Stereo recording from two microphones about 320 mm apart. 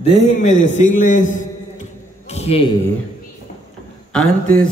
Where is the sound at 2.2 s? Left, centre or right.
Centre.